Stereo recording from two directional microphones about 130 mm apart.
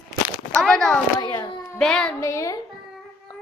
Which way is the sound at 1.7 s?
5° left (ahead or behind).